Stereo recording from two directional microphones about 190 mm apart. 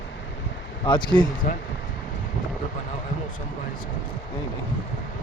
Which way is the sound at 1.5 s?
40° left (ahead or behind).